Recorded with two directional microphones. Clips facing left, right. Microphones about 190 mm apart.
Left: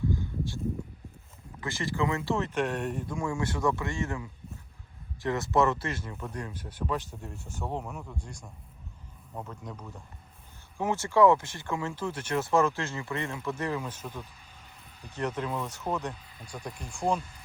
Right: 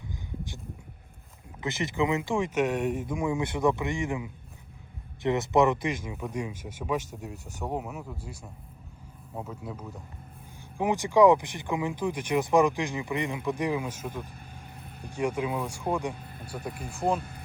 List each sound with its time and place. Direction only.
0.1 s a sound: 15° right (ahead or behind)
1.6 s speech: 20° right (ahead or behind); by 17.2 s 5° right (ahead or behind)
17.2 s speech: 60° right (ahead or behind)